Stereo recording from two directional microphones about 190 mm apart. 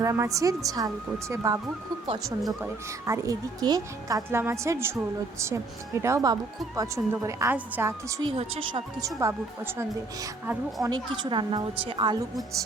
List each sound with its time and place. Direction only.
0.0 s a woman's voice: 15° right (ahead or behind)
2.4 s speech: centre (ahead or behind)
3.1 s a woman's voice: 20° right (ahead or behind)
8.2 s a woman's voice: 30° right (ahead or behind)
9.0 s a woman's voice: 15° right (ahead or behind)
10.8 s a woman's voice: 25° right (ahead or behind)